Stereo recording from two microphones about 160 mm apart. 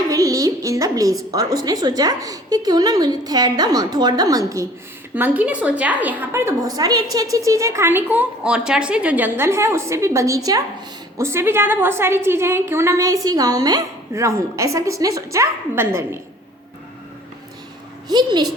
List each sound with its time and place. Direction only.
0.1 s a sound: 20° right (ahead or behind)
1.3 s a woman's voice: 20° right (ahead or behind)
18.1 s a woman's voice: 25° right (ahead or behind)